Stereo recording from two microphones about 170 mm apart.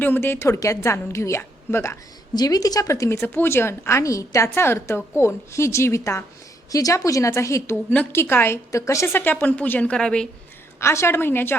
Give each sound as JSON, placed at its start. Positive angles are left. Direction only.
{"t": 0.0, "sound": "a woman's voice", "side_deg": 10}